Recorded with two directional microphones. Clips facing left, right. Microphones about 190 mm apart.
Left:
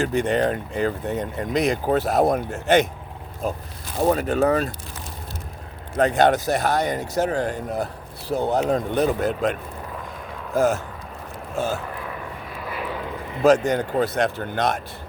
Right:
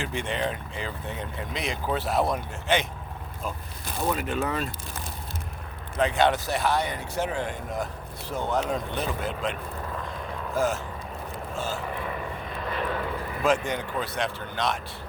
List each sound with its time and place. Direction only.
0.0 s speech: 40° left (ahead or behind)
6.0 s speech: 45° left (ahead or behind)
11.5 s vehicle: 60° left (ahead or behind)
12.5 s vehicle: 5° left (ahead or behind)
13.4 s speech: 40° left (ahead or behind)